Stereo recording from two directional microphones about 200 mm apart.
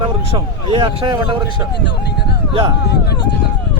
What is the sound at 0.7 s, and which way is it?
Speech, 25° right (ahead or behind).